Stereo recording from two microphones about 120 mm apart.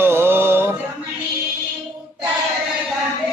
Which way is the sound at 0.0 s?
20° right (ahead or behind).